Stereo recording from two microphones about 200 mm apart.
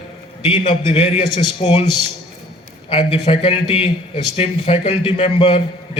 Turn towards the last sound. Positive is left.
turn(degrees=25)  # may be behind; listen again after turning